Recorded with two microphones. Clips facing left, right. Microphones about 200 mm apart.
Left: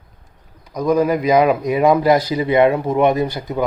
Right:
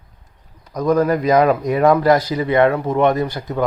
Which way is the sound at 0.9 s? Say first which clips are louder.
Even; 15° left (ahead or behind).